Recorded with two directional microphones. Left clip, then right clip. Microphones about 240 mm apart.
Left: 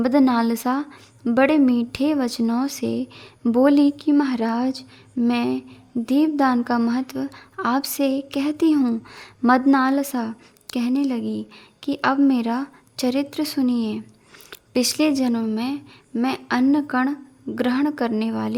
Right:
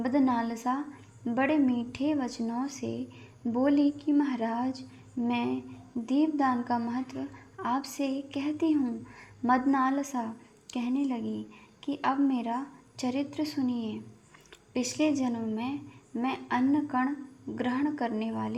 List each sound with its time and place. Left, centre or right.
0.0 s a woman's voice: left